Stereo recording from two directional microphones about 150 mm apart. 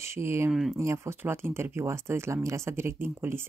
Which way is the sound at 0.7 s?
20° right (ahead or behind).